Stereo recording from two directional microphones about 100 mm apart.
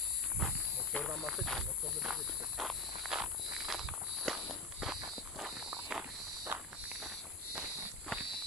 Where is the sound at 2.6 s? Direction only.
5° right (ahead or behind).